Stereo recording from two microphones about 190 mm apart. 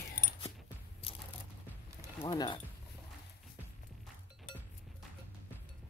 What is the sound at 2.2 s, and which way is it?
Speech, 25° left (ahead or behind).